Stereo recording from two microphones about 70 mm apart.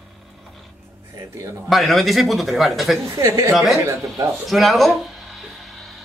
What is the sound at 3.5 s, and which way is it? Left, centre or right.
A man's voice, centre.